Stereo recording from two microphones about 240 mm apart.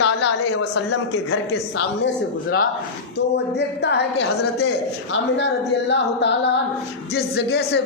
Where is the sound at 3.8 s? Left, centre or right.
Left.